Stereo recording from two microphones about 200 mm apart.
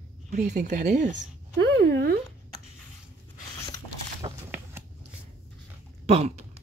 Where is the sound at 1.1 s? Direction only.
60° right (ahead or behind).